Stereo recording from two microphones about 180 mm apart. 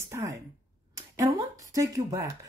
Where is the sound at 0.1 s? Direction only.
15° right (ahead or behind).